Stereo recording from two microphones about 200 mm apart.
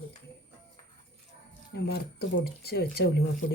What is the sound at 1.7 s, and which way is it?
Speech, 55° left (ahead or behind).